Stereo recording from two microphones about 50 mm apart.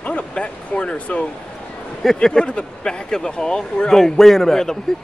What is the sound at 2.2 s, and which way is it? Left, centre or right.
Speech, centre.